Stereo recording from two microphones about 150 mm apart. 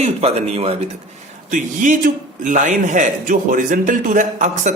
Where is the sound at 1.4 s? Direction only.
60° right (ahead or behind).